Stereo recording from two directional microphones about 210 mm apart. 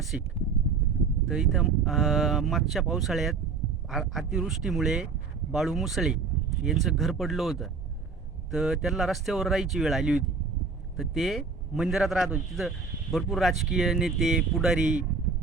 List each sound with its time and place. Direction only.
0.1 s a man's voice: 5° right (ahead or behind)
1.3 s a man's voice: centre (ahead or behind)